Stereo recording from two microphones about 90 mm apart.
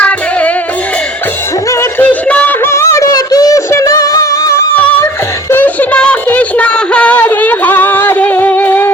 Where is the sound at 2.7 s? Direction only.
30° left (ahead or behind).